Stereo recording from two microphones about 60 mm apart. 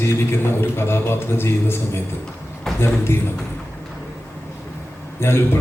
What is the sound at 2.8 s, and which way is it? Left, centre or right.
Speech, left.